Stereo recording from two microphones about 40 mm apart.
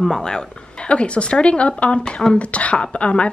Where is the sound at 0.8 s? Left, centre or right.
Left.